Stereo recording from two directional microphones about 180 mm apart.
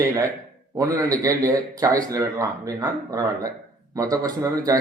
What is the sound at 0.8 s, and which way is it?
A man's voice, 20° right (ahead or behind).